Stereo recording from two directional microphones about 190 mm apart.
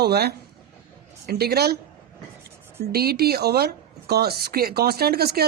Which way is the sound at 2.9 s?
55° right (ahead or behind).